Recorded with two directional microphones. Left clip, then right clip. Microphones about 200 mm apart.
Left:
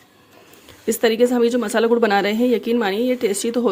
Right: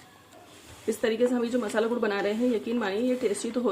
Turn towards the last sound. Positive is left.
turn(degrees=50)  # may be behind; listen again after turning